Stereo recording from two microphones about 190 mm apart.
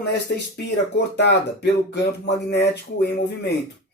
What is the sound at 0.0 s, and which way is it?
Speech, 60° left (ahead or behind).